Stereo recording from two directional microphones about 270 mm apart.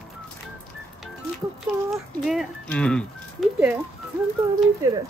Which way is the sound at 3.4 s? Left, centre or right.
Centre.